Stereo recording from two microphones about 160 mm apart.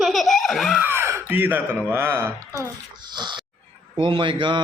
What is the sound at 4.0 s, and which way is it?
Speech, 30° right (ahead or behind).